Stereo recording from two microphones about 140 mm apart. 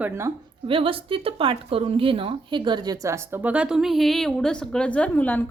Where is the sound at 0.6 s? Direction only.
40° right (ahead or behind).